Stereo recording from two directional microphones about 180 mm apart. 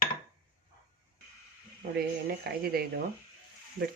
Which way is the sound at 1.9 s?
60° right (ahead or behind).